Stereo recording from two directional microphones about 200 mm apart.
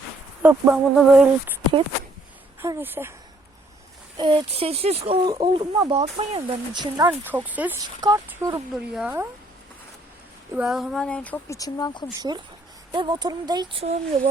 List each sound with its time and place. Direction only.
0.4 s speech: 10° right (ahead or behind)
2.6 s speech: 10° right (ahead or behind)
4.2 s speech: 25° right (ahead or behind)
7.1 s speech: 10° right (ahead or behind)
10.5 s speech: 5° right (ahead or behind); by 12.0 s 20° left (ahead or behind)
12.9 s speech: 20° right (ahead or behind)
13.9 s speech: 35° right (ahead or behind)